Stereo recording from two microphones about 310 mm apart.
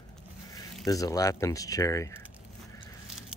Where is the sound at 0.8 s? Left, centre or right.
Centre.